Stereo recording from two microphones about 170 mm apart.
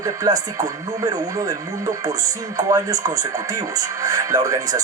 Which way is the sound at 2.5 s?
20° right (ahead or behind).